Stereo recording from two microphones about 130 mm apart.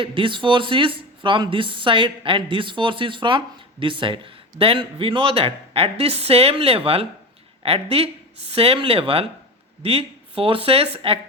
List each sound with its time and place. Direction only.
0.0 s speech: 40° right (ahead or behind)